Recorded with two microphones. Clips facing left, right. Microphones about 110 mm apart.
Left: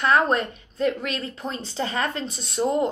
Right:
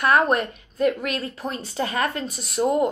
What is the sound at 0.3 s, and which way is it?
A woman's voice, 30° left (ahead or behind).